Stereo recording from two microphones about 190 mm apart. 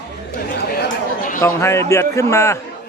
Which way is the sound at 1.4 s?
15° left (ahead or behind).